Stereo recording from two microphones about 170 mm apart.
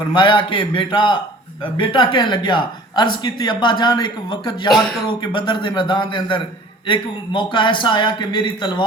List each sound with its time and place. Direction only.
0.1 s speech: 30° left (ahead or behind)